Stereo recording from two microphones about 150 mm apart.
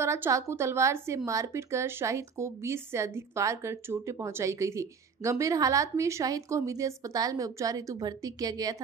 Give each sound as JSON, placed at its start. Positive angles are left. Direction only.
{"t": 0.0, "sound": "a woman's voice", "side_deg": -20}